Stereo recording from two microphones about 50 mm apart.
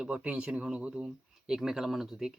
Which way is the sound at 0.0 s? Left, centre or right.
Right.